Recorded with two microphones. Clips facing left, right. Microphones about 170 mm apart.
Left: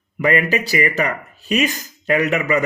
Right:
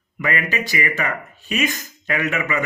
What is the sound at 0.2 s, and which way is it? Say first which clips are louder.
Speech: left 6 dB; 35° left (ahead or behind).